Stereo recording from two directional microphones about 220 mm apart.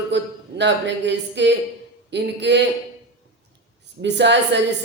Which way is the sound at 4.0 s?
50° right (ahead or behind).